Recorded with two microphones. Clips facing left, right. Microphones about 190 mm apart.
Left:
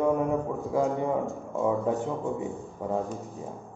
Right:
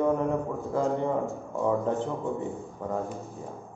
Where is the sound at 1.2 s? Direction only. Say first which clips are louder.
Left 1 dB; centre (ahead or behind).